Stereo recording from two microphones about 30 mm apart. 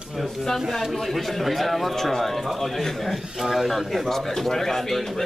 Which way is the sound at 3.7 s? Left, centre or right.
Centre.